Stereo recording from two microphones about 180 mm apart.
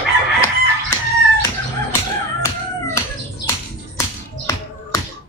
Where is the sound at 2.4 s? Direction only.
15° left (ahead or behind).